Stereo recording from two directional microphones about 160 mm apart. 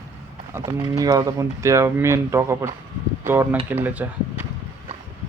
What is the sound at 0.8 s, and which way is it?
A man's voice, 20° right (ahead or behind).